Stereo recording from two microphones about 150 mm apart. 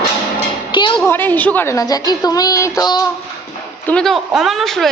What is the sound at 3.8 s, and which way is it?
Speech, 5° left (ahead or behind).